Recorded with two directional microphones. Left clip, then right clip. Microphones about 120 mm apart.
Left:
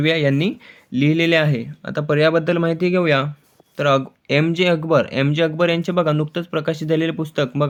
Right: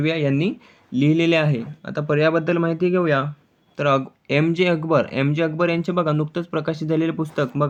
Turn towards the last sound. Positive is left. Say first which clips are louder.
# left 2 dB
turn(degrees=35)  # may be behind; listen again after turning